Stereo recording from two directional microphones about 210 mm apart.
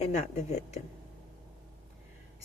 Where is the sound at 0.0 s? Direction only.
35° left (ahead or behind).